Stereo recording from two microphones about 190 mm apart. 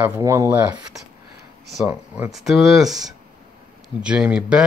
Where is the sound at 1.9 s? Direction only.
5° right (ahead or behind).